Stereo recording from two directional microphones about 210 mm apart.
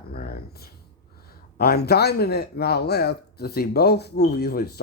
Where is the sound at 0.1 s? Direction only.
45° left (ahead or behind).